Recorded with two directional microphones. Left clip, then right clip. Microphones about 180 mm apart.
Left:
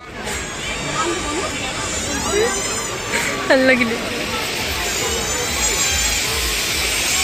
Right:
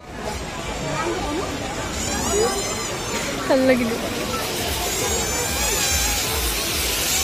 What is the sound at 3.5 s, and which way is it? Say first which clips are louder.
Speech: left 4 dB; 5° right (ahead or behind).